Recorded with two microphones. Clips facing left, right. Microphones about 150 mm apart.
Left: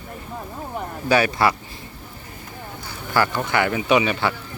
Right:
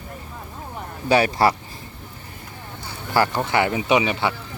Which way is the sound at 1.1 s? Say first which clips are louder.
Right 1 dB; 30° right (ahead or behind).